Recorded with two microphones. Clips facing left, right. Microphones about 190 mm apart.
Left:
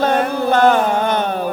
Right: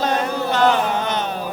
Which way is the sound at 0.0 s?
55° left (ahead or behind).